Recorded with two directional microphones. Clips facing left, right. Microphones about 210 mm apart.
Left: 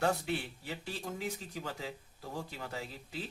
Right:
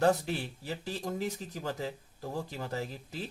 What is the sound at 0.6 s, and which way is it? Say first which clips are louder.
Speech: right 4 dB; 40° right (ahead or behind).